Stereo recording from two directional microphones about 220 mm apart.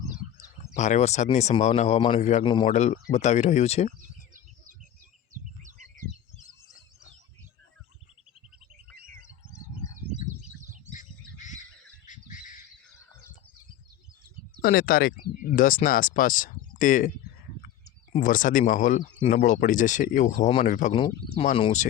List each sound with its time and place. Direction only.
0.6 s speech: 30° left (ahead or behind)
9.0 s bird: 40° right (ahead or behind)
9.5 s bird: 15° left (ahead or behind)
10.9 s bird: 35° left (ahead or behind)
14.6 s speech: 40° left (ahead or behind)
18.1 s speech: 35° left (ahead or behind)